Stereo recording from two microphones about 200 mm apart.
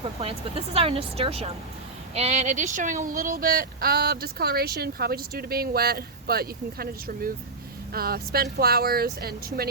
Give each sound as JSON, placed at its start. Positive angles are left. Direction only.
{"t": 0.2, "sound": "speech", "side_deg": -30}